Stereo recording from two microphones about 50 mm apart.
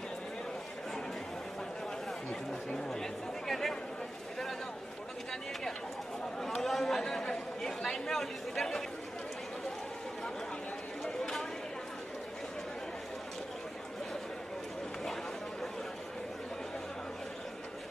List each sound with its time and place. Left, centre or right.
2.7 s speech: centre
6.4 s speech: centre